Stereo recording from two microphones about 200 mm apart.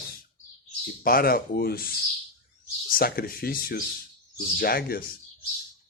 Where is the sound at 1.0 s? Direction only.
45° left (ahead or behind).